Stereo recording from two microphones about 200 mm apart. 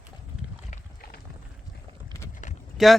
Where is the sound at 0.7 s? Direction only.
50° left (ahead or behind).